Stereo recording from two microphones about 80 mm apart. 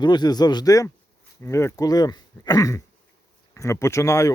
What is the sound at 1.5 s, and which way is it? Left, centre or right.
Speech, left.